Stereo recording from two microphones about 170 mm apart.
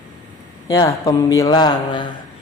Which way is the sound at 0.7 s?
20° left (ahead or behind).